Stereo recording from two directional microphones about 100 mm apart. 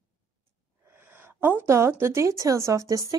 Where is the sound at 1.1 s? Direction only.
20° right (ahead or behind).